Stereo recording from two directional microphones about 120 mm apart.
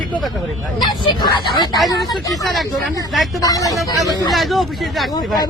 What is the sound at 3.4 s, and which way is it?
Speech, 30° left (ahead or behind).